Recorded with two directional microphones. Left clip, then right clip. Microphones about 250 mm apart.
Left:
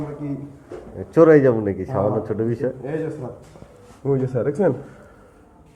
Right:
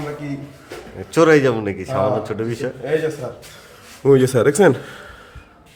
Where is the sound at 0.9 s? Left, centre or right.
Centre.